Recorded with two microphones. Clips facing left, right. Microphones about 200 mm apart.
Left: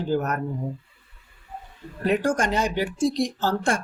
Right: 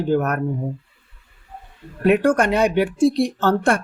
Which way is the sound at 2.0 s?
60° right (ahead or behind).